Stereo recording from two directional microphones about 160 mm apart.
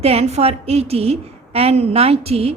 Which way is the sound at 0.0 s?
40° right (ahead or behind).